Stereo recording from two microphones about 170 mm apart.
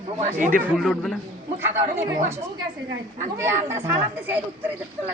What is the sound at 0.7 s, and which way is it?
Speech, centre (ahead or behind).